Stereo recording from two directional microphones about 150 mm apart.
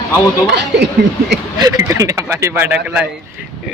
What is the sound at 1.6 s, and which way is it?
Speech, 20° right (ahead or behind).